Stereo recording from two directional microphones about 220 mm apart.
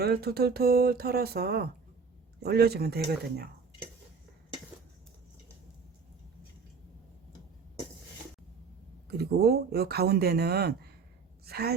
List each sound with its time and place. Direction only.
0.0 s speech: 45° right (ahead or behind)
9.0 s a woman's voice: 45° right (ahead or behind)